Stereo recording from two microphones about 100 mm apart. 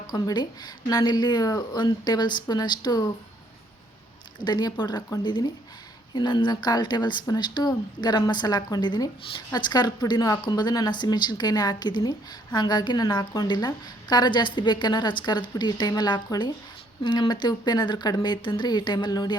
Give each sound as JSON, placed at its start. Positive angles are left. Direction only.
{"t": 0.1, "sound": "speech", "side_deg": 45}
{"t": 4.4, "sound": "speech", "side_deg": 45}